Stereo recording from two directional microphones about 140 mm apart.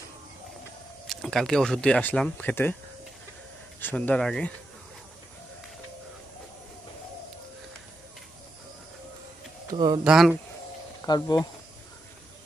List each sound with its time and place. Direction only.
1.0 s speech: centre (ahead or behind)
3.8 s speech: 10° left (ahead or behind)
9.7 s speech: 35° right (ahead or behind)
10.0 s speech: centre (ahead or behind)
11.1 s speech: 30° left (ahead or behind)